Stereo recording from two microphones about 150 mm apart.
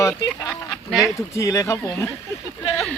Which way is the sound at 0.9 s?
Centre (ahead or behind).